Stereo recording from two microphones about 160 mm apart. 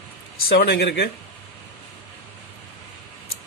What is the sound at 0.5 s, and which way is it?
Speech, 90° left.